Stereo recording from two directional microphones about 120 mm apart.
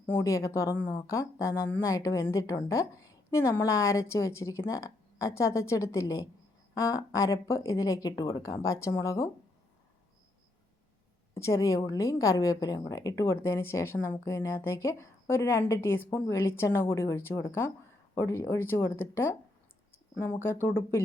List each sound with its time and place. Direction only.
0.2 s a woman's voice: 25° left (ahead or behind)
11.3 s a woman's voice: 25° left (ahead or behind)
20.4 s a woman's voice: 20° left (ahead or behind)